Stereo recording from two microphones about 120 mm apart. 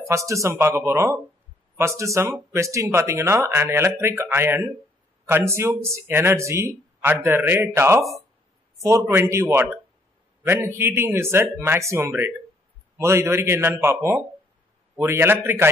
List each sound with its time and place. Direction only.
0.1 s speech: 25° right (ahead or behind)
9.1 s speech: 20° right (ahead or behind)